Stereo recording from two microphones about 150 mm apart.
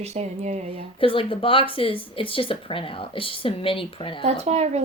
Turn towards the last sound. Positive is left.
turn(degrees=-45)  # may be behind; listen again after turning